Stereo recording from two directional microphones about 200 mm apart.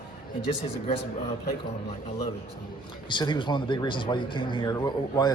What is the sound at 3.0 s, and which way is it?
Speech, 25° left (ahead or behind).